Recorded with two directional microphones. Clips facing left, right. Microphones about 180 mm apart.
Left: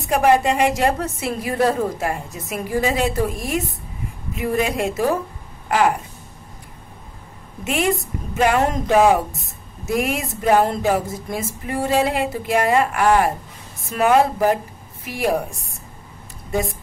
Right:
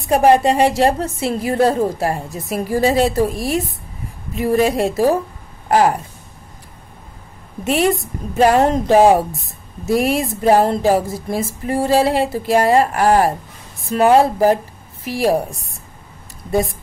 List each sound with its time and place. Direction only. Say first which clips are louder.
0.1 s a woman's voice: right 4 dB; 35° right (ahead or behind)
7.6 s a woman's voice: right 4 dB; 35° right (ahead or behind)